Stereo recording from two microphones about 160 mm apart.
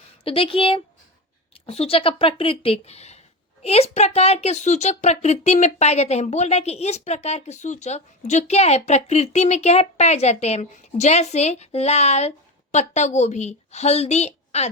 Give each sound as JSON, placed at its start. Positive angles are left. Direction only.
{"t": 0.3, "sound": "a woman's voice", "side_deg": 35}